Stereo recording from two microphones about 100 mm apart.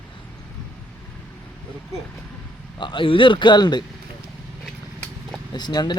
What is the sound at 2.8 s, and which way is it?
A man's voice, 55° left (ahead or behind).